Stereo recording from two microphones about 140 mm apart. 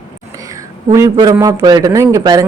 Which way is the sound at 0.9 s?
25° right (ahead or behind).